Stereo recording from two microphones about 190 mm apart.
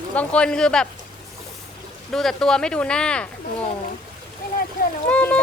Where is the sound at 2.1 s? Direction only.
5° left (ahead or behind).